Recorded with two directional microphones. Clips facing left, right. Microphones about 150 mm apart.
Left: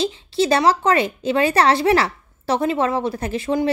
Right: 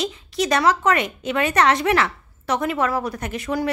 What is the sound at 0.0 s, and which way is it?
A woman's voice, 30° left (ahead or behind).